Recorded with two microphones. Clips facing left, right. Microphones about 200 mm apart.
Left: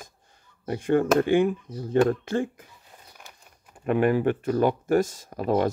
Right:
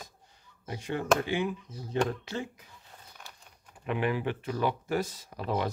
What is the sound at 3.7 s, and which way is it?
Speech, 50° left (ahead or behind).